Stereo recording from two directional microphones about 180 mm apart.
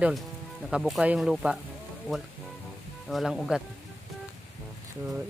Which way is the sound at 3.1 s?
Centre (ahead or behind).